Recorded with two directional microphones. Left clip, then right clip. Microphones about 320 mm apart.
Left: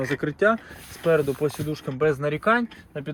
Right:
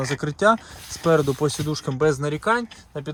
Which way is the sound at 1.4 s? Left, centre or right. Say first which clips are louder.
Right 2 dB; right.